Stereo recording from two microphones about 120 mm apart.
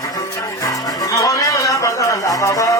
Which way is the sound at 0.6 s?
30° left (ahead or behind).